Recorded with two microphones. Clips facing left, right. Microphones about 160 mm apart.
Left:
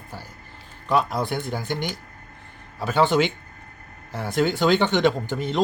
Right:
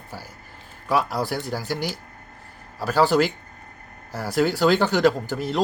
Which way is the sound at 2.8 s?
Centre (ahead or behind).